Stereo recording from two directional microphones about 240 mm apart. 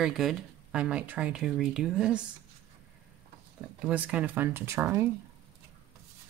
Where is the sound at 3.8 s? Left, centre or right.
Centre.